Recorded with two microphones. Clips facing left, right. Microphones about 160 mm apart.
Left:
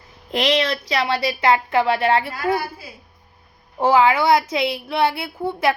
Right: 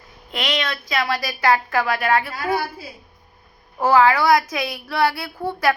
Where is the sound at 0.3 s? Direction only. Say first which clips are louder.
Left 6 dB; 35° left (ahead or behind).